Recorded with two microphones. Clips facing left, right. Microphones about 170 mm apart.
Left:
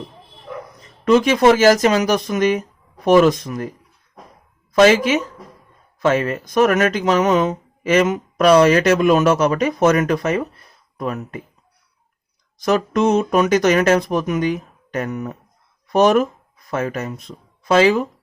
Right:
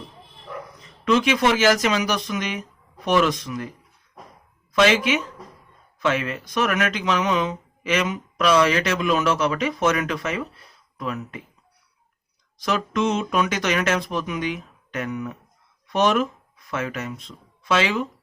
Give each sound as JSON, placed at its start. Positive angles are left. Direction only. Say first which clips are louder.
{"t": 1.0, "sound": "speech", "louder": "left 6 dB", "side_deg": 45}
{"t": 12.6, "sound": "speech", "louder": "left 6 dB", "side_deg": 45}